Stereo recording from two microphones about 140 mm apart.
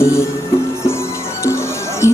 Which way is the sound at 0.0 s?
20° left (ahead or behind).